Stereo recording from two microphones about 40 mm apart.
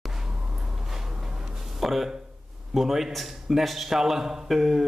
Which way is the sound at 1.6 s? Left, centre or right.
Centre.